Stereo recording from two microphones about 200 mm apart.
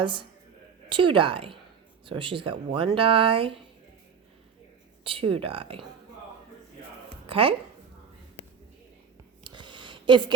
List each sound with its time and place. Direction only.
0.0 s speech: 25° right (ahead or behind)
5.0 s speech: 25° right (ahead or behind)
7.3 s speech: 25° right (ahead or behind)
9.4 s a sound: 25° right (ahead or behind)